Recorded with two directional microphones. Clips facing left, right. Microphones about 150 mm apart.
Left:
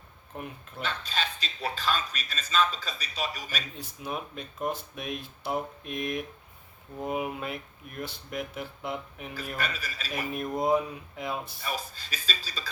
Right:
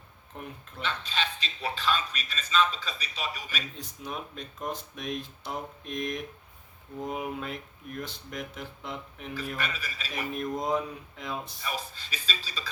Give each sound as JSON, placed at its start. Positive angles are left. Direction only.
{"t": 0.8, "sound": "a man's voice", "side_deg": 40}
{"t": 3.8, "sound": "speech", "side_deg": 5}
{"t": 9.6, "sound": "a man's voice", "side_deg": 40}
{"t": 10.3, "sound": "speech", "side_deg": 10}
{"t": 11.6, "sound": "a man's voice", "side_deg": 40}